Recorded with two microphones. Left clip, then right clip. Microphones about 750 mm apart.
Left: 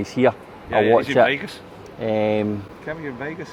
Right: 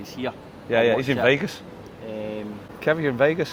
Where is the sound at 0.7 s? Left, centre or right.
Right.